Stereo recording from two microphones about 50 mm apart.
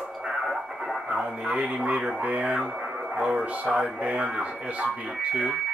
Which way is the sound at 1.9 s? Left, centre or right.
Right.